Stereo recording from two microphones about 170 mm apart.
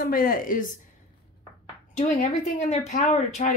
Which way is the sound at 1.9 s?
45° left (ahead or behind).